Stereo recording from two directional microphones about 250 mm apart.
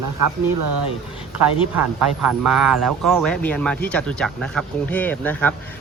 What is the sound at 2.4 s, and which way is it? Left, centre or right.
Speech, centre.